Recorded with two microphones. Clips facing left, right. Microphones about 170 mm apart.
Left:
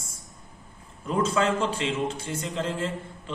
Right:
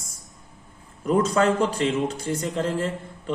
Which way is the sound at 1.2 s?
40° right (ahead or behind).